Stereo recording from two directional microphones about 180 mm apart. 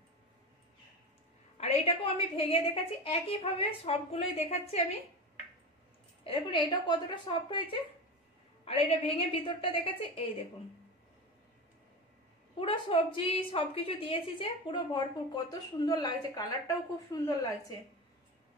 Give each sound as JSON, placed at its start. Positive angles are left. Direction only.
{"t": 1.6, "sound": "a woman's voice", "side_deg": 35}
{"t": 6.2, "sound": "a woman's voice", "side_deg": 30}
{"t": 12.5, "sound": "a woman's voice", "side_deg": 30}